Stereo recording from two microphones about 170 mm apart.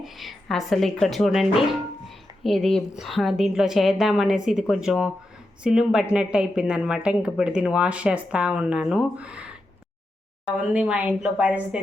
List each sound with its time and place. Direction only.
0.0 s a woman's voice: centre (ahead or behind)
10.7 s a woman's voice: 10° right (ahead or behind)